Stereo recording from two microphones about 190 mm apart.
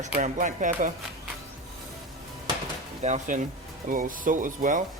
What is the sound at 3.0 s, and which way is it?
Speech, 40° right (ahead or behind).